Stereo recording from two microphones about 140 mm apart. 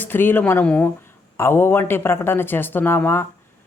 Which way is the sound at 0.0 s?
15° left (ahead or behind).